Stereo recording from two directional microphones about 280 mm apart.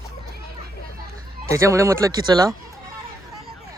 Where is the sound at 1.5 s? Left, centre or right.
Centre.